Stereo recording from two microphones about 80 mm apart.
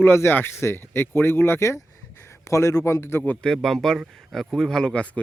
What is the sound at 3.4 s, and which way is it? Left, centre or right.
Speech, centre.